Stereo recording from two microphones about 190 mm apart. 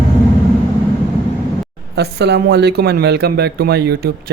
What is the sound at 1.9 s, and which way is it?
Speech, 60° right (ahead or behind).